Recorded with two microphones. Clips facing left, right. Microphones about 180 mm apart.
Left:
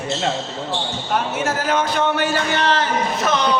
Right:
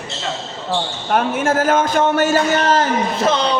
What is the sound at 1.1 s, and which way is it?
A man's voice, 50° right (ahead or behind).